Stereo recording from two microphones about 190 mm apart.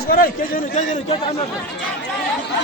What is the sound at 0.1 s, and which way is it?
Speech, 50° left (ahead or behind).